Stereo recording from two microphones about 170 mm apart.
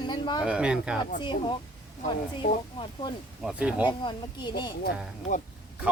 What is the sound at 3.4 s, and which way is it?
Speech, 5° right (ahead or behind).